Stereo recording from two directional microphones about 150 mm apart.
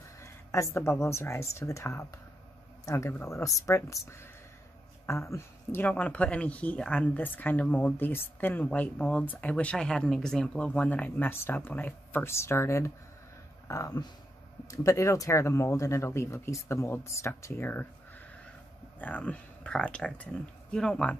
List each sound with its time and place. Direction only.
0.2 s speech: 20° left (ahead or behind)
18.9 s speech: 10° left (ahead or behind)